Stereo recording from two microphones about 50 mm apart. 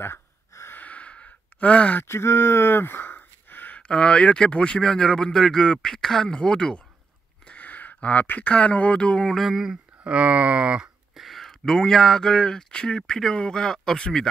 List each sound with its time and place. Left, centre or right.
0.7 s sigh: left
2.0 s speech: left
3.7 s speech: left
7.4 s speech: left
9.3 s a sound: centre
9.6 s speech: centre
11.1 s speech: centre